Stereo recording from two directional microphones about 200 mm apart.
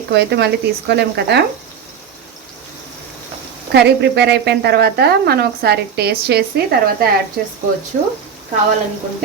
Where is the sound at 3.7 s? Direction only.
55° right (ahead or behind).